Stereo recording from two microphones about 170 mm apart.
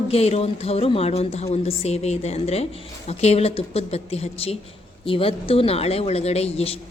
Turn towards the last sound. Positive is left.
turn(degrees=35)  # may be behind; listen again after turning